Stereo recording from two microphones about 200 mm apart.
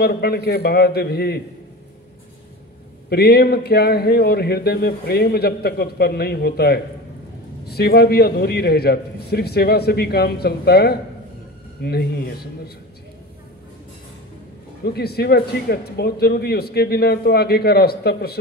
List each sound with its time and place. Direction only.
0.0 s speech: 50° left (ahead or behind)
3.1 s speech: 50° left (ahead or behind)
14.8 s speech: 50° left (ahead or behind)